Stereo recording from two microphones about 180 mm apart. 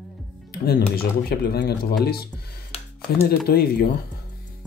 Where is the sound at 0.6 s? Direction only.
60° left (ahead or behind).